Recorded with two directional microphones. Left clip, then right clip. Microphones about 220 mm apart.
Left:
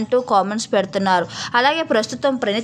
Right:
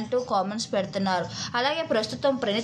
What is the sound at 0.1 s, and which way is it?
A woman's voice, 35° left (ahead or behind).